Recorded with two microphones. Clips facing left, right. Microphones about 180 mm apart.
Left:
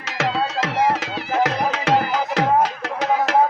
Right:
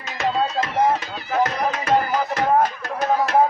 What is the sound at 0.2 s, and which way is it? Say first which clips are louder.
Music: even; 90° left.